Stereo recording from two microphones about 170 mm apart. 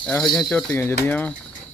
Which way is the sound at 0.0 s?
5° left (ahead or behind).